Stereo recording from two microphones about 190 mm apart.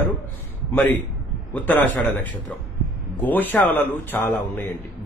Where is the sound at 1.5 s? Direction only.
10° left (ahead or behind).